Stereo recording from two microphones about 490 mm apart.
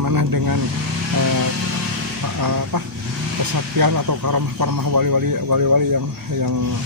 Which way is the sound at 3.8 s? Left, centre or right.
Right.